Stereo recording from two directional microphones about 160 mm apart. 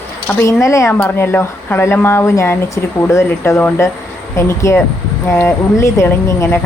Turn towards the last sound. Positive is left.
turn(degrees=15)  # may be behind; listen again after turning